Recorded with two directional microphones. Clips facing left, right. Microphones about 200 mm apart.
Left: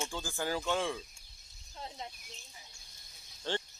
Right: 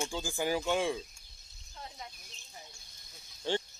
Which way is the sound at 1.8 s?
25° left (ahead or behind).